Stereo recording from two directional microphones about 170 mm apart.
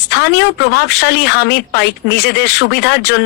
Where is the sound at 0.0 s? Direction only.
85° left.